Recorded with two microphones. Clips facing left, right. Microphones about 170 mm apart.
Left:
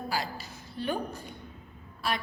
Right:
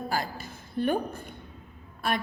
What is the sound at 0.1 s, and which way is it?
Hiccup, 50° right (ahead or behind).